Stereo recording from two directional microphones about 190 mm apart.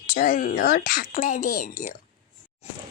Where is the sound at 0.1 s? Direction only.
45° left (ahead or behind).